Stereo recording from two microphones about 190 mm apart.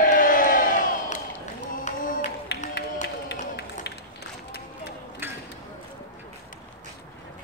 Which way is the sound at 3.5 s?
60° left (ahead or behind).